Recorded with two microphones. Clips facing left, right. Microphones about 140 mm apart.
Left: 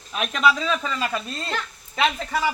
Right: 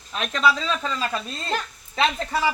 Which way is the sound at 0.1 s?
5° left (ahead or behind).